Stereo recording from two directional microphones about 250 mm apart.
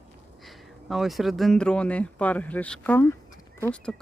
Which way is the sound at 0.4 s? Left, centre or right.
Centre.